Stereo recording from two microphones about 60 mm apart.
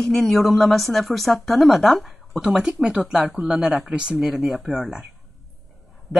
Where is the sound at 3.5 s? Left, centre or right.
Centre.